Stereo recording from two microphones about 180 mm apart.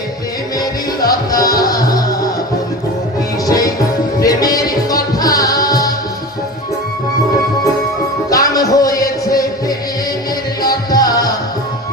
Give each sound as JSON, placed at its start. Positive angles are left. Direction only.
{"t": 0.6, "sound": "music", "side_deg": 20}
{"t": 3.4, "sound": "music", "side_deg": 20}
{"t": 8.3, "sound": "music", "side_deg": 20}
{"t": 10.9, "sound": "music", "side_deg": 20}